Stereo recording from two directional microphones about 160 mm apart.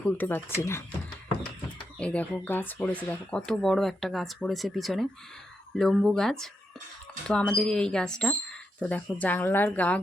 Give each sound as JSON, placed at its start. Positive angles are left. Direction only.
{"t": 0.0, "sound": "speech", "side_deg": 10}
{"t": 2.0, "sound": "speech", "side_deg": 10}